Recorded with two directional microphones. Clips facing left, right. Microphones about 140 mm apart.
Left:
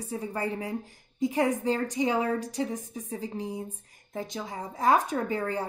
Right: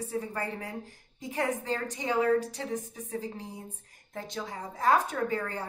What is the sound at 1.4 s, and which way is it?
A woman's voice, 15° left (ahead or behind).